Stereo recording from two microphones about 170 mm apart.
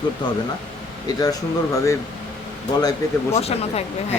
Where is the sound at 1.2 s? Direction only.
20° left (ahead or behind).